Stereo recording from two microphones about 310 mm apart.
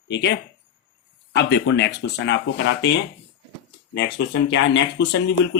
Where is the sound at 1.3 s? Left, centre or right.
Left.